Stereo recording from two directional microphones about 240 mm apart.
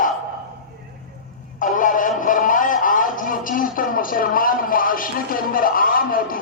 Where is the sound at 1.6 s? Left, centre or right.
Left.